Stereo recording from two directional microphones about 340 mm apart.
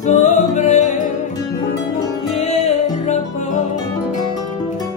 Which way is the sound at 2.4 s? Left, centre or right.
Centre.